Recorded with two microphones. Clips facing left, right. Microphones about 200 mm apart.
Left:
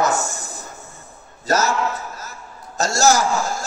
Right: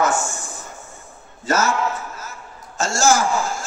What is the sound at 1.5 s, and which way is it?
Speech, 40° left (ahead or behind).